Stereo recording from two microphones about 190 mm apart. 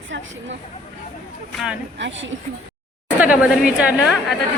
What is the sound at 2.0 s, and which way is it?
Speech, 75° right (ahead or behind).